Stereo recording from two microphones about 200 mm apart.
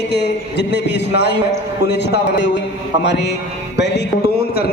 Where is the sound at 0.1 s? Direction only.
55° left (ahead or behind).